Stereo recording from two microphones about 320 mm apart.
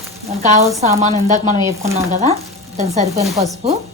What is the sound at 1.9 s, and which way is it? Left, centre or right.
Stir, centre.